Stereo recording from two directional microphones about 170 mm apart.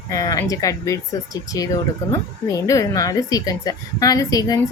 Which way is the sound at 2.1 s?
20° left (ahead or behind).